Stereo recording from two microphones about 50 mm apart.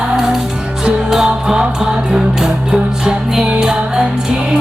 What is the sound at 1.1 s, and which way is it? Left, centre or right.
Music, centre.